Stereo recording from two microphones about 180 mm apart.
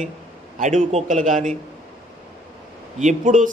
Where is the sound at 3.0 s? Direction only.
45° right (ahead or behind).